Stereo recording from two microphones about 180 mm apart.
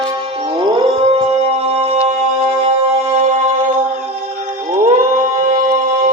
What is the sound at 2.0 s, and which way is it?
Music, 40° right (ahead or behind).